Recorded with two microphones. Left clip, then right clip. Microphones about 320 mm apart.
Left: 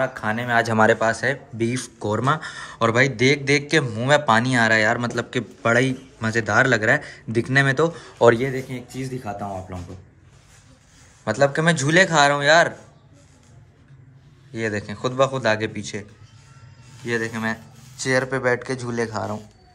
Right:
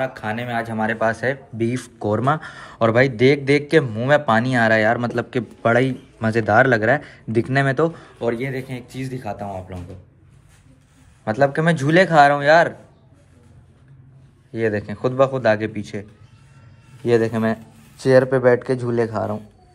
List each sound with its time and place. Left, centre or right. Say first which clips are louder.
0.0 s speech: left 1 dB; centre
0.7 s speech: left 9 dB; left
0.9 s speech: right 1 dB; centre
11.2 s speech: right 1 dB; centre
14.5 s speech: right 4 dB; centre